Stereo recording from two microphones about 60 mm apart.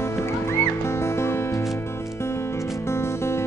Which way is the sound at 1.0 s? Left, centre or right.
Left.